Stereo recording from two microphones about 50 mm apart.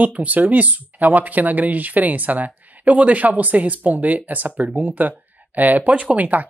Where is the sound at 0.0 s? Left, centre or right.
Right.